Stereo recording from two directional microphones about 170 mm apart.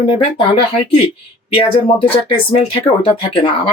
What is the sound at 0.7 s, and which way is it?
Speech, 35° left (ahead or behind).